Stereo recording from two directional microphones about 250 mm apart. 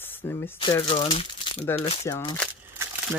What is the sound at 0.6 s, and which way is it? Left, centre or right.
Speech, centre.